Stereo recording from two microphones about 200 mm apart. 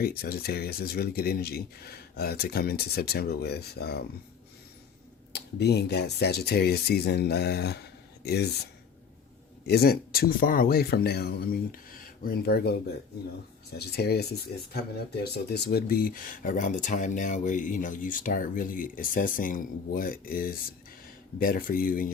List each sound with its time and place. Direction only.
0.0 s speech: 50° left (ahead or behind)
5.3 s speech: 55° left (ahead or behind)
9.6 s speech: 50° left (ahead or behind)
13.7 s speech: 55° left (ahead or behind)